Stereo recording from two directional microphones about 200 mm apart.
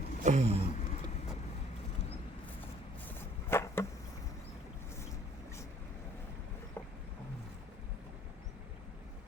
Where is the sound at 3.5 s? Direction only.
15° left (ahead or behind).